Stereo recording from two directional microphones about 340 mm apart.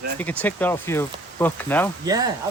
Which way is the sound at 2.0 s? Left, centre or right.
Centre.